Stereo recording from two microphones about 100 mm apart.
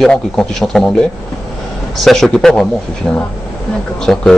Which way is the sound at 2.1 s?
5° left (ahead or behind).